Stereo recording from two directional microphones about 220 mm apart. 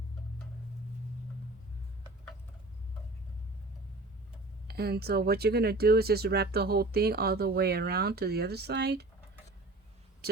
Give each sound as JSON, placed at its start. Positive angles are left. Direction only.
{"t": 4.7, "sound": "speech", "side_deg": -45}